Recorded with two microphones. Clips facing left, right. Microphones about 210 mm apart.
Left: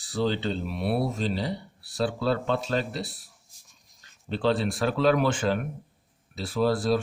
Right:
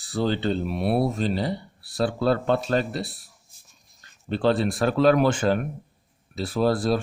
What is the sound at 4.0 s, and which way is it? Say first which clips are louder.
Speech: right 3 dB; 50° right (ahead or behind).